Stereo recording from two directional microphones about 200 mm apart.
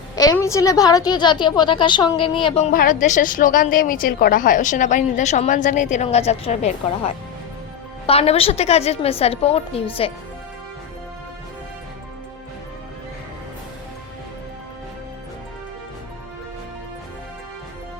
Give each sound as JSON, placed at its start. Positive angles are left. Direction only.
{"t": 0.2, "sound": "a woman's voice", "side_deg": 15}